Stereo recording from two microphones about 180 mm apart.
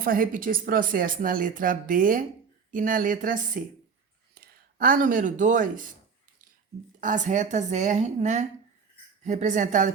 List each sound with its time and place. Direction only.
0.0 s speech: 50° right (ahead or behind)
7.0 s a woman's voice: 45° right (ahead or behind)